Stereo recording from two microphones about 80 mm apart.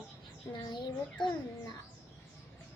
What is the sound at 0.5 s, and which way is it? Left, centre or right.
A child's voice, left.